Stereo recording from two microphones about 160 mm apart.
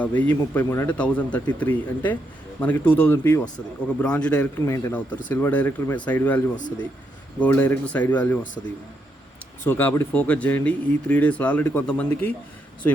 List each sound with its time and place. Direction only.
0.0 s speech: 10° left (ahead or behind)
4.6 s speech: 15° left (ahead or behind)